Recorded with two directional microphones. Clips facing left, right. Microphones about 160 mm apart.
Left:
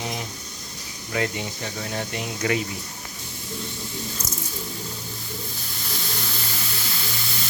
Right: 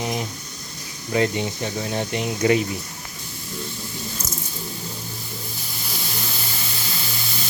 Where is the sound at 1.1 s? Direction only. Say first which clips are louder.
Right 5 dB; 25° right (ahead or behind).